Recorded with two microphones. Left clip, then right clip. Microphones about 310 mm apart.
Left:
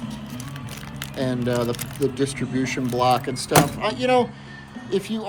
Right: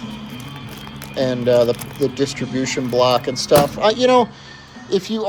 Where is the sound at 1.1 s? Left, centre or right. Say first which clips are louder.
Right 9 dB; centre.